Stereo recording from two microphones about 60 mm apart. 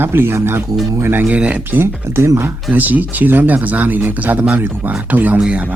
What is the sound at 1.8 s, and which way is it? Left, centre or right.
Speech, right.